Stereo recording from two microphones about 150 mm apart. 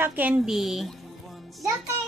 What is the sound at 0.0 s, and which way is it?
Speech, 10° right (ahead or behind).